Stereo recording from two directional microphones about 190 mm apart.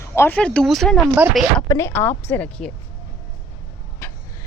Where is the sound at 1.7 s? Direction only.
15° left (ahead or behind).